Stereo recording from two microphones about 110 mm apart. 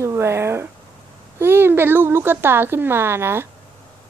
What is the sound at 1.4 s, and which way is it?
Speech, 20° right (ahead or behind).